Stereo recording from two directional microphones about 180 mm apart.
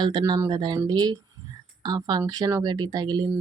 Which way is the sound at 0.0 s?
25° right (ahead or behind).